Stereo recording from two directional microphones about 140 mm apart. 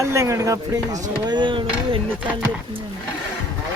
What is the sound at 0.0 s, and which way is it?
Speech, 20° right (ahead or behind).